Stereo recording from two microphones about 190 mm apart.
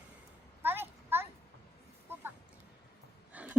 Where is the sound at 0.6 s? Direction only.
10° right (ahead or behind).